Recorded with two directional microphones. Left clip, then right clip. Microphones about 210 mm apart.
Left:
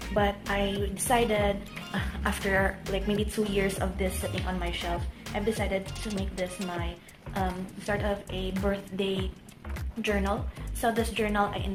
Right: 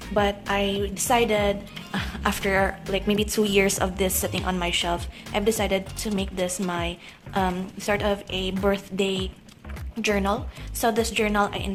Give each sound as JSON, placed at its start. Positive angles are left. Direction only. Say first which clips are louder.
{"t": 0.1, "sound": "a woman's voice", "louder": "right 4 dB", "side_deg": -25}